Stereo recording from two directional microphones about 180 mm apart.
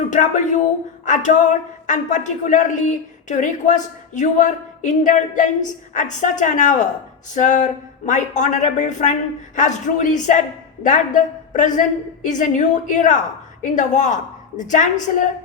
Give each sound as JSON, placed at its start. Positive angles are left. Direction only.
{"t": 0.1, "sound": "speech", "side_deg": 45}